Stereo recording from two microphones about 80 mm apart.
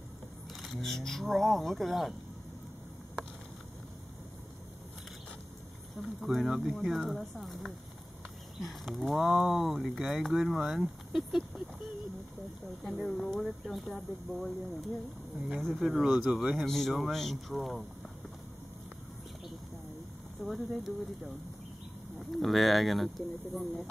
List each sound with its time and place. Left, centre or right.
0.7 s speech: centre
5.9 s speech: centre
12.8 s speech: centre
20.4 s speech: right
20.8 s speech: centre